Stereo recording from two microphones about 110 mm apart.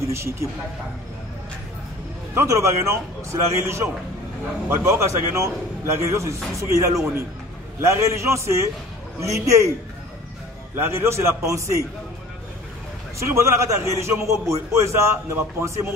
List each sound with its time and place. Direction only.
0.0 s speech: 25° right (ahead or behind)
2.3 s a man's voice: 25° right (ahead or behind)
10.8 s a man's voice: 20° right (ahead or behind)
13.2 s a man's voice: 25° right (ahead or behind)